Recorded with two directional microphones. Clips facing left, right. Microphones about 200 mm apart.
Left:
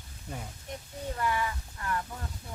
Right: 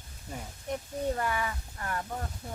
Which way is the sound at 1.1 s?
45° right (ahead or behind).